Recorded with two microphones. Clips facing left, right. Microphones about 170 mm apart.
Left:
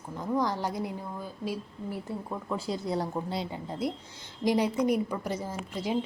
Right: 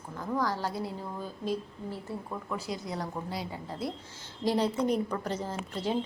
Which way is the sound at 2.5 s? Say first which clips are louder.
Left 5 dB; 30° left (ahead or behind).